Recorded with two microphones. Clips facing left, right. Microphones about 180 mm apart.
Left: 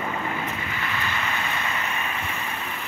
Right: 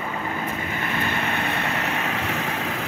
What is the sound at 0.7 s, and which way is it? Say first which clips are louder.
Vehicle: right 4 dB; 50° right (ahead or behind).